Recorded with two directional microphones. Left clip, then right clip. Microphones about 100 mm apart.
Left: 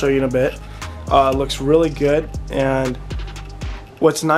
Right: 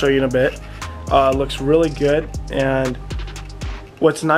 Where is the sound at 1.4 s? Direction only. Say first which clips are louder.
Left 1 dB; 10° left (ahead or behind).